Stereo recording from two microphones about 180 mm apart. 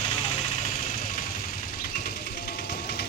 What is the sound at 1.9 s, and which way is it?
Engine, 60° left (ahead or behind).